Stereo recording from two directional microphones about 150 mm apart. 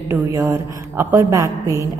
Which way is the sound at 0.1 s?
15° right (ahead or behind).